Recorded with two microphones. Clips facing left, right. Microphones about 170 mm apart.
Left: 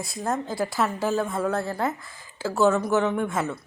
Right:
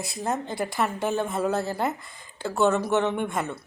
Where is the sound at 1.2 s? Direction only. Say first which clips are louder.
Even; 20° right (ahead or behind).